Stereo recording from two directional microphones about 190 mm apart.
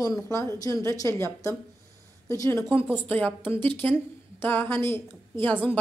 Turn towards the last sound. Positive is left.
turn(degrees=10)  # may be behind; listen again after turning